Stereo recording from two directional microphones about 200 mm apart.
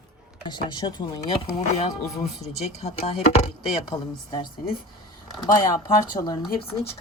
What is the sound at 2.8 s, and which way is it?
Speech, 30° left (ahead or behind).